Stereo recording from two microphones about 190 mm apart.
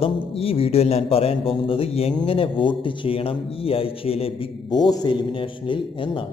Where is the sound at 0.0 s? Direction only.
30° left (ahead or behind).